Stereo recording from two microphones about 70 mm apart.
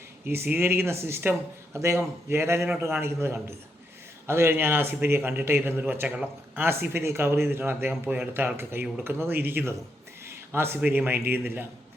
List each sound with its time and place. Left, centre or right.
0.3 s speech: right
10.2 s a sound: right
10.8 s speech: right